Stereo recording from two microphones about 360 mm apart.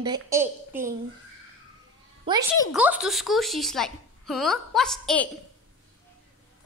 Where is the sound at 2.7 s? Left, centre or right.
Centre.